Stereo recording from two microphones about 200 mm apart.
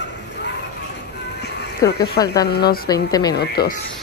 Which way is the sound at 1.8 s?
15° left (ahead or behind).